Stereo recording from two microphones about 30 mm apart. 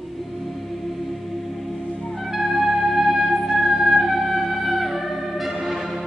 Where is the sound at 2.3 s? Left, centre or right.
Centre.